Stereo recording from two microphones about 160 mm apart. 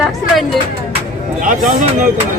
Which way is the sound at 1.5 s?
55° right (ahead or behind).